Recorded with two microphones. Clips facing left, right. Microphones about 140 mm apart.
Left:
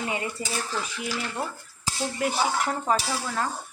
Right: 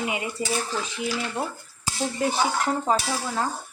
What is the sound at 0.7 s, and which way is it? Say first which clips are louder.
Dishes: right 3 dB; 20° right (ahead or behind).